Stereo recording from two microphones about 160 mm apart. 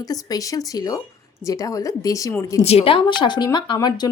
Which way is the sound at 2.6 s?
40° left (ahead or behind).